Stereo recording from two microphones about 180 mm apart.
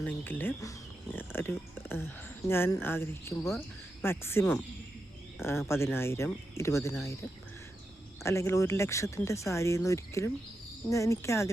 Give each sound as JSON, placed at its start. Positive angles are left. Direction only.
{"t": 0.0, "sound": "speech", "side_deg": 10}
{"t": 8.2, "sound": "speech", "side_deg": 15}